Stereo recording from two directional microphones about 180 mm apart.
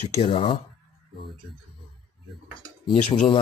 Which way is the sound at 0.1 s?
35° left (ahead or behind).